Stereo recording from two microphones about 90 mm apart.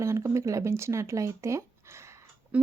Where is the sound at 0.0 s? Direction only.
30° right (ahead or behind).